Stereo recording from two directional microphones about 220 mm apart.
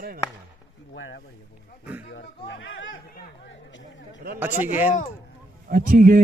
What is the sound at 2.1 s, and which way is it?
Music, 50° left (ahead or behind).